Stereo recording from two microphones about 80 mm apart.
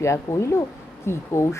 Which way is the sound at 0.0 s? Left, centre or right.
Left.